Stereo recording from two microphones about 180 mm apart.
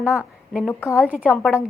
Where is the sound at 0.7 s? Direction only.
10° left (ahead or behind).